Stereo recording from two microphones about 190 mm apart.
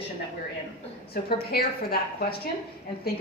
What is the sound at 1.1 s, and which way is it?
Speech, 55° left (ahead or behind).